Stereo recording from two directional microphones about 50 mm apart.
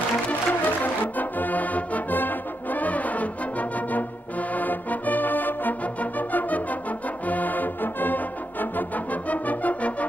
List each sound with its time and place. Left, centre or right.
0.3 s music: left